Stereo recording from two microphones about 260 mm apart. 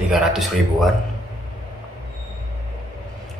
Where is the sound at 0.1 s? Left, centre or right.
Centre.